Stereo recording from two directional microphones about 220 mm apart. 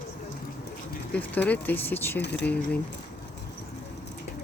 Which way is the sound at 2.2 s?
50° left (ahead or behind).